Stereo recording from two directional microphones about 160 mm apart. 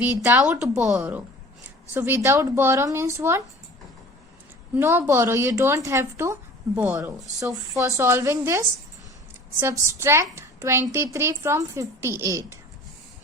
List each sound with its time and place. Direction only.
0.0 s a woman's voice: 15° right (ahead or behind)
0.7 s a woman's voice: 5° right (ahead or behind)
4.7 s a woman's voice: 15° right (ahead or behind)